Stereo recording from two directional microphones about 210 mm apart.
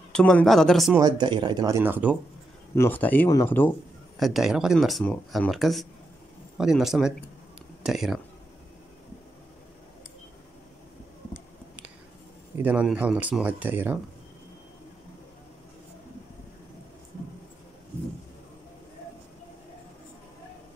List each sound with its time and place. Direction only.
0.1 s speech: 5° left (ahead or behind)
0.9 s speech: 20° right (ahead or behind)
2.7 s speech: 10° left (ahead or behind)
4.2 s speech: centre (ahead or behind)
12.6 s speech: 5° right (ahead or behind)